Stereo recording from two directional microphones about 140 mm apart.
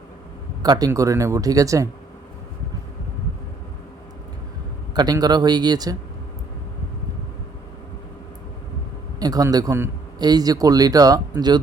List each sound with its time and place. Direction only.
0.6 s speech: 25° right (ahead or behind)
4.9 s speech: 30° right (ahead or behind)
9.1 s a man's voice: 25° right (ahead or behind)